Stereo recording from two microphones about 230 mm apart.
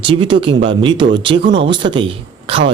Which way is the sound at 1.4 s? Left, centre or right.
Right.